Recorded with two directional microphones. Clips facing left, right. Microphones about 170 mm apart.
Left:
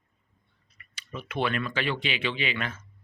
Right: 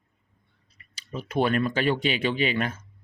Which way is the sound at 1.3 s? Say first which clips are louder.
Right 5 dB; 40° right (ahead or behind).